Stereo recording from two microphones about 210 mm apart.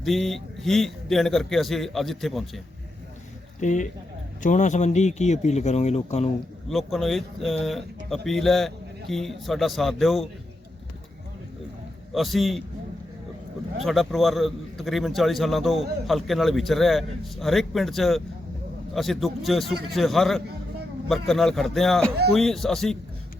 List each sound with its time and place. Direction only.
0.0 s a man's voice: centre (ahead or behind)
3.6 s speech: 35° left (ahead or behind)
6.7 s a man's voice: centre (ahead or behind)
12.1 s a man's voice: centre (ahead or behind)
13.8 s a man's voice: centre (ahead or behind)